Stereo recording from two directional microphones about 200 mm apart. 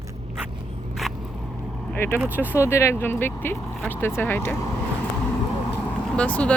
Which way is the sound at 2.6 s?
15° left (ahead or behind).